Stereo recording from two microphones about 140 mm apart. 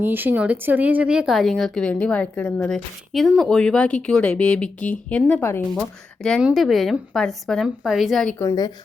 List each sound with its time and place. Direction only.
0.0 s speech: 15° right (ahead or behind); by 5.6 s 15° left (ahead or behind)
5.7 s speech: 5° left (ahead or behind)
8.4 s a woman's voice: 25° left (ahead or behind)